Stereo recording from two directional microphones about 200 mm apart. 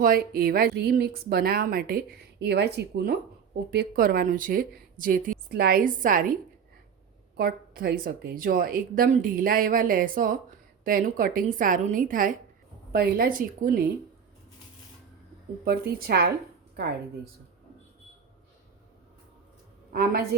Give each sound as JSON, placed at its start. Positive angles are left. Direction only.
{"t": 0.0, "sound": "a woman's voice", "side_deg": -45}
{"t": 15.6, "sound": "a woman's voice", "side_deg": -50}
{"t": 19.9, "sound": "a woman's voice", "side_deg": -50}